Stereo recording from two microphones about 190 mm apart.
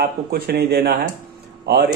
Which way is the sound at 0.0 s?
55° right (ahead or behind).